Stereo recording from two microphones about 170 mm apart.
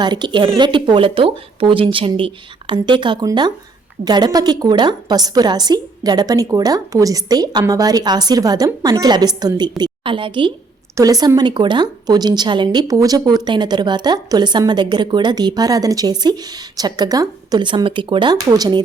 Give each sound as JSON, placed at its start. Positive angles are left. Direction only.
{"t": 0.0, "sound": "a woman's voice", "side_deg": -25}